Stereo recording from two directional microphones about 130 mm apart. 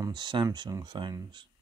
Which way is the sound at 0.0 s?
35° right (ahead or behind).